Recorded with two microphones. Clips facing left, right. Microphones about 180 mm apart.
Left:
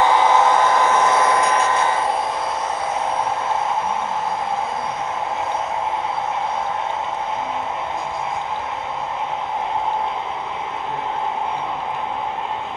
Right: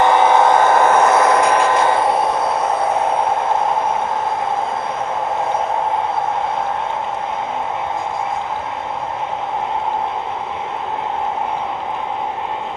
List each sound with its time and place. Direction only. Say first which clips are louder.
0.0 s vehicle: right 3 dB; 55° right (ahead or behind)